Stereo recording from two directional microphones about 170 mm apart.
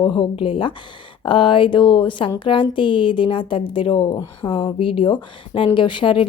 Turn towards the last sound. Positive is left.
turn(degrees=30)  # may be behind; listen again after turning